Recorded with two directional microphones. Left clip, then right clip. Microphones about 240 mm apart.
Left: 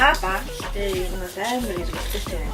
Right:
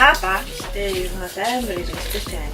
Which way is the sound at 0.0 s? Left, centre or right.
Centre.